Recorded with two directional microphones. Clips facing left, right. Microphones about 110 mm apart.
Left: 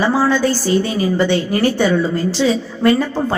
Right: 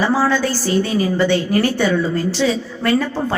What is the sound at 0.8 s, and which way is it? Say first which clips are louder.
Speech: even; 20° left (ahead or behind).